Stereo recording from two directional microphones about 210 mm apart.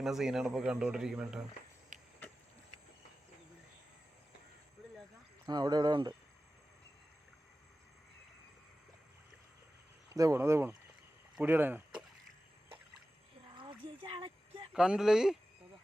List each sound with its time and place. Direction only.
0.0 s speech: centre (ahead or behind)
1.9 s a sound: 35° right (ahead or behind)
5.5 s speech: 20° right (ahead or behind)
10.2 s speech: 15° right (ahead or behind)
13.6 s a sound: 25° right (ahead or behind)
14.7 s speech: 5° right (ahead or behind)